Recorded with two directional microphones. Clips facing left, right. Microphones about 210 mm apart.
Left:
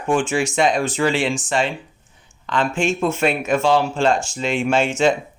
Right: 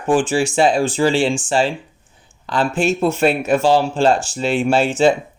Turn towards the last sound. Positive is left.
turn(degrees=-35)  # may be behind; listen again after turning